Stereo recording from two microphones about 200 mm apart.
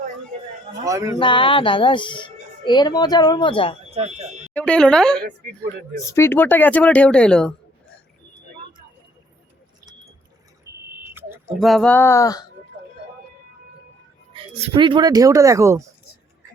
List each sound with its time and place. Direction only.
0.9 s a sound: 15° right (ahead or behind)
1.2 s speech: 25° left (ahead or behind)
3.9 s speech: 35° right (ahead or behind)
4.4 s a woman's voice: 5° left (ahead or behind)
11.0 s a sound: 10° right (ahead or behind)
11.6 s speech: centre (ahead or behind); by 12.5 s 15° left (ahead or behind)
14.3 s speech: 25° right (ahead or behind)